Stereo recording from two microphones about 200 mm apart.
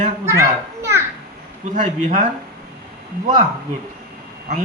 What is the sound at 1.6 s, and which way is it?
Speech, 40° right (ahead or behind).